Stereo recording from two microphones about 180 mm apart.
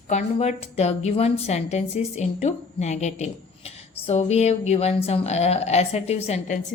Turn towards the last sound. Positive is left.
turn(degrees=35)  # may be behind; listen again after turning